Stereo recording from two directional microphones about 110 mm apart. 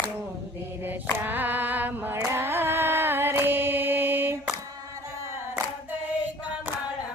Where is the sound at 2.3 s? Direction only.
20° right (ahead or behind).